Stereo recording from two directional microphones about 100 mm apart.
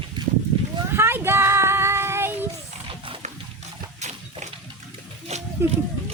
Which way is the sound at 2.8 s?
65° right (ahead or behind).